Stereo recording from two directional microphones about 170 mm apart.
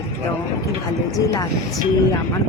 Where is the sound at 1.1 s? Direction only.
20° left (ahead or behind).